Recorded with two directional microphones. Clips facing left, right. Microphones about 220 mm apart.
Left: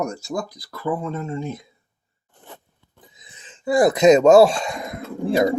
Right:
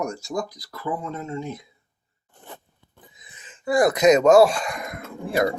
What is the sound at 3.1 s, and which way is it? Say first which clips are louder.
Speech: left 1 dB; 25° left (ahead or behind).